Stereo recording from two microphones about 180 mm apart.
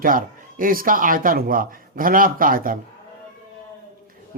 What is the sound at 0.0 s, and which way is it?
A man's voice, 50° right (ahead or behind).